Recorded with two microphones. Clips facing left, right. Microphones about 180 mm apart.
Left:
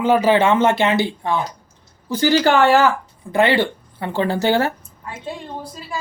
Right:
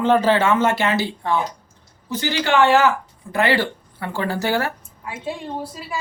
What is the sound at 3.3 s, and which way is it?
Speech, 20° left (ahead or behind).